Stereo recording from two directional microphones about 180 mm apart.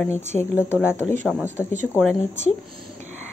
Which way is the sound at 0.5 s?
10° right (ahead or behind).